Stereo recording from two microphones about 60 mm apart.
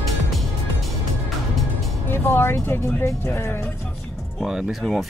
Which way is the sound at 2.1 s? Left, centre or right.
Left.